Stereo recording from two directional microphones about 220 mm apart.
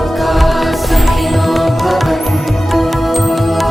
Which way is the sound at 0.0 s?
Centre (ahead or behind).